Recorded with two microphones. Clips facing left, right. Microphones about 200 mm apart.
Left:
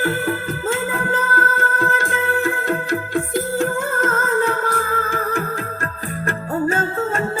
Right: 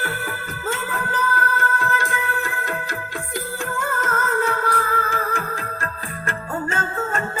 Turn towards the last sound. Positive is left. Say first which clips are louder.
# left 4 dB
turn(degrees=35)  # may be behind; listen again after turning